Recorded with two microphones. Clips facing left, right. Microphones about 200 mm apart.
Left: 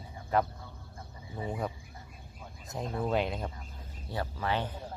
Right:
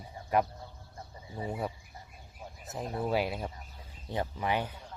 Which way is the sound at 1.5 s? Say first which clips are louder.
Even; 10° right (ahead or behind).